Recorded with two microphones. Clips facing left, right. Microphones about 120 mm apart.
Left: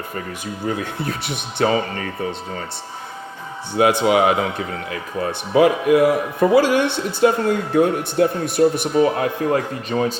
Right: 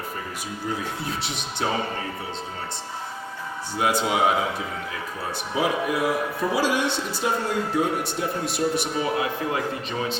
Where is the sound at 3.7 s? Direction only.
65° left (ahead or behind).